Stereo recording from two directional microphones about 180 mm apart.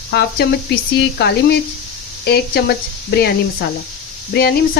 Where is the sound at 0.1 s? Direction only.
65° left (ahead or behind).